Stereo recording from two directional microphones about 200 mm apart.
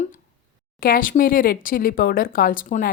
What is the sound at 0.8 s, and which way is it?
Speech, 45° left (ahead or behind).